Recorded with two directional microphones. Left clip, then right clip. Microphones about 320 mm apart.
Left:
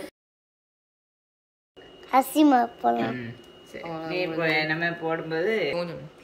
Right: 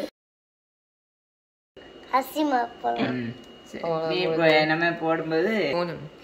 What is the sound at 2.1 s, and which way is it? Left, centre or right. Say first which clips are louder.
Speech: left 4 dB; left.